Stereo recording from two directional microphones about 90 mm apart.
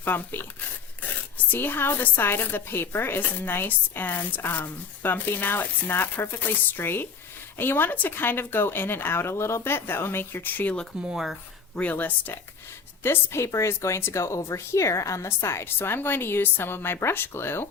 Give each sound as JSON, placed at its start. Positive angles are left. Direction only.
{"t": 0.0, "sound": "speech", "side_deg": 25}
{"t": 11.0, "sound": "speech", "side_deg": -5}
{"t": 11.7, "sound": "speech", "side_deg": 20}